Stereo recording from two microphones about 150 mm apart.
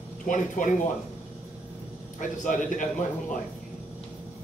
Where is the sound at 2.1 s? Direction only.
60° left (ahead or behind).